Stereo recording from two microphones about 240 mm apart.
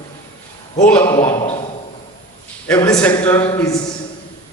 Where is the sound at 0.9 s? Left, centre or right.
Centre.